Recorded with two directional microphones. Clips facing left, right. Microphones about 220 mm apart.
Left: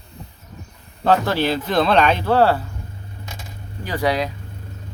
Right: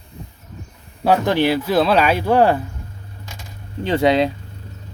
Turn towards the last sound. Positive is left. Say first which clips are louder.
# right 6 dB
turn(degrees=-25)  # may be behind; listen again after turning